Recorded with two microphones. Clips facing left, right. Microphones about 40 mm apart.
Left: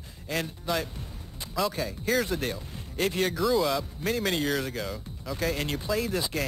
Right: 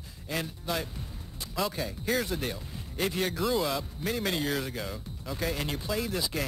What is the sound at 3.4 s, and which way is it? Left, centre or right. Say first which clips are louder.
Speech: left 4 dB; centre.